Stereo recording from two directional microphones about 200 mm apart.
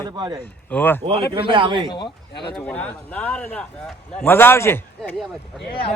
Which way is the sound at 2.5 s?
5° left (ahead or behind).